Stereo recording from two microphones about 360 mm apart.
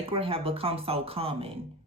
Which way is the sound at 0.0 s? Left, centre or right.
Centre.